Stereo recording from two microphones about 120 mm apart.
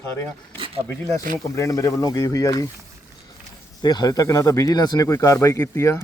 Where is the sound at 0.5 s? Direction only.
45° right (ahead or behind).